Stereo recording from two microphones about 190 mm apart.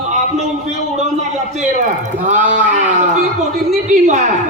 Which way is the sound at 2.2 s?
40° right (ahead or behind).